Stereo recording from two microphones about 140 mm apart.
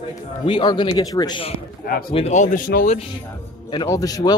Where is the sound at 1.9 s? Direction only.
90° left.